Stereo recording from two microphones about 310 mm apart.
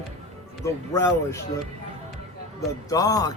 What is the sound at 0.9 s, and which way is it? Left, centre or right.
Speech, centre.